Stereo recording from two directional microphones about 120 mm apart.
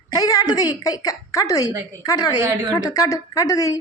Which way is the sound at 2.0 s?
35° left (ahead or behind).